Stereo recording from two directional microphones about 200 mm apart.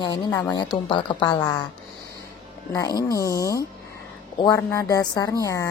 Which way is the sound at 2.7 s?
20° left (ahead or behind).